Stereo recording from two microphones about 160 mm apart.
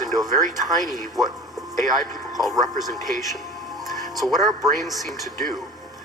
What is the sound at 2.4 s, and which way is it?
Speech, centre (ahead or behind).